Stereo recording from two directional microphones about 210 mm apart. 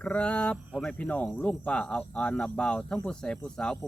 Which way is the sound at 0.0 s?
5° left (ahead or behind).